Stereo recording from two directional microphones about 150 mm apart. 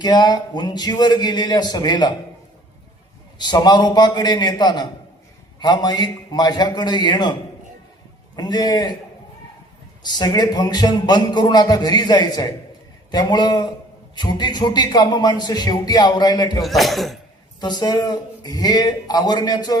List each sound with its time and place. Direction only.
0.0 s a man's voice: 30° left (ahead or behind)
3.3 s a man's voice: 30° left (ahead or behind)
8.4 s a man's voice: 25° left (ahead or behind)
10.0 s a man's voice: 30° left (ahead or behind)
16.6 s speech: centre (ahead or behind)
17.6 s a man's voice: 30° left (ahead or behind)